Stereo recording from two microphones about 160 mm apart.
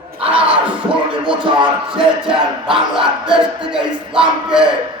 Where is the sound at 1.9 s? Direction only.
5° right (ahead or behind).